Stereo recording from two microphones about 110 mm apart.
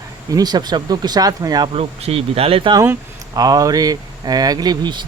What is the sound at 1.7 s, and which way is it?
Speech, 70° right (ahead or behind).